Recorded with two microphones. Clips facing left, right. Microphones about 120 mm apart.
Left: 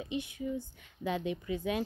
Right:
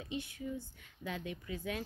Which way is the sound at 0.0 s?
15° left (ahead or behind).